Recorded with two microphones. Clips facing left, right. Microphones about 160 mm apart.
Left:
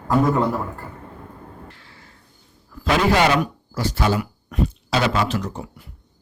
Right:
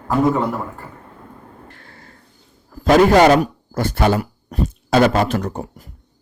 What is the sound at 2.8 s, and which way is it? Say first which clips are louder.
Speech: right 7 dB; 45° right (ahead or behind).